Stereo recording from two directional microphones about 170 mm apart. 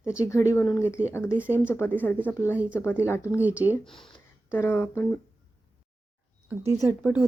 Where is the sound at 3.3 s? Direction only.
10° right (ahead or behind).